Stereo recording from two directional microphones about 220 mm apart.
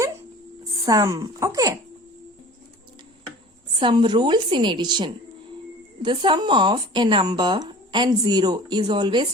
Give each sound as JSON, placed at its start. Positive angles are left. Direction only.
{"t": 0.9, "sound": "a woman's voice", "side_deg": -15}
{"t": 3.8, "sound": "speech", "side_deg": -20}